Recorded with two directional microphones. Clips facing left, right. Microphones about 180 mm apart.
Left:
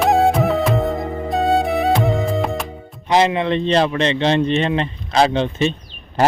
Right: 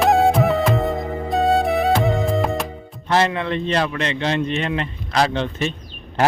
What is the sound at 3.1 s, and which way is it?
A man's voice, 20° left (ahead or behind).